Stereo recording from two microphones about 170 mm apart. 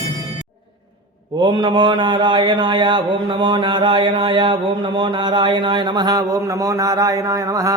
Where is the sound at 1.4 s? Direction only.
25° right (ahead or behind).